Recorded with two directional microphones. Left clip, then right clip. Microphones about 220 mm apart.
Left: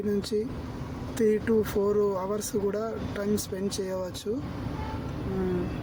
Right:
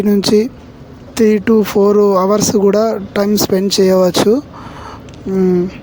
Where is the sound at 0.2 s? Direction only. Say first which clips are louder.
Right 17 dB; 45° right (ahead or behind).